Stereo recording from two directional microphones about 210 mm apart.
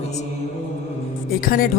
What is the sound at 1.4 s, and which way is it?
Speech, 45° left (ahead or behind).